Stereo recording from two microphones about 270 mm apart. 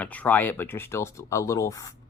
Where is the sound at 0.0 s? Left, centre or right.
Centre.